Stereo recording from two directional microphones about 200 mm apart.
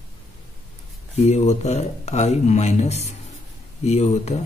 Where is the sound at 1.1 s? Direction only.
35° left (ahead or behind).